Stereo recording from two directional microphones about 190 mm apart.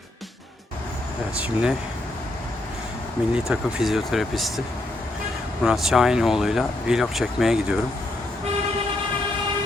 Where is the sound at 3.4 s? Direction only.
Centre (ahead or behind).